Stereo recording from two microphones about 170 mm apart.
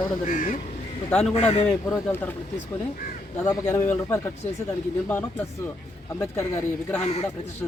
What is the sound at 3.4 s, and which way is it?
Speech, 10° left (ahead or behind).